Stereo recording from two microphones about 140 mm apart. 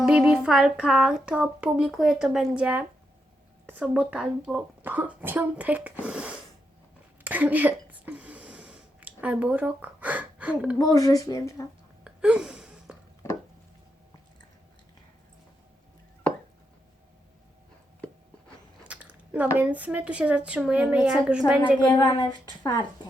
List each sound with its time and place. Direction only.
0.0 s speech: 5° right (ahead or behind)
7.3 s a sound: 10° right (ahead or behind)
10.8 s speech: 25° left (ahead or behind)
12.0 s a sound: 5° right (ahead or behind)
18.9 s chewing: 10° right (ahead or behind)
19.5 s speech: 10° right (ahead or behind)
21.8 s speech: 30° left (ahead or behind)